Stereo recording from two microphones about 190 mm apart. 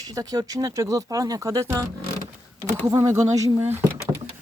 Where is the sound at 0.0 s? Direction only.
20° right (ahead or behind).